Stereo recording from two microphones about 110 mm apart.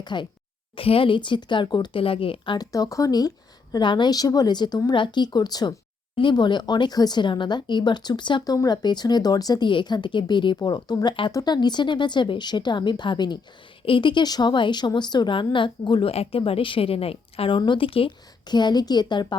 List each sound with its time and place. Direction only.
0.0 s a woman's voice: 45° left (ahead or behind)
0.8 s speech: 55° left (ahead or behind)
2.7 s a woman's voice: 30° left (ahead or behind)
16.1 s a woman's voice: 60° left (ahead or behind)
18.4 s a woman's voice: 40° left (ahead or behind)